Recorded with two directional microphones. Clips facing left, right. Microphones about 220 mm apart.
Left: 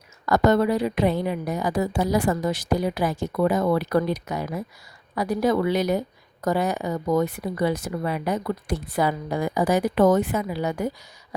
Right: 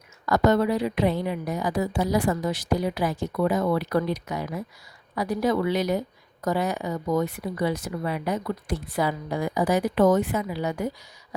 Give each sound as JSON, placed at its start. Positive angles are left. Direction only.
{"t": 0.3, "sound": "a woman's voice", "side_deg": 45}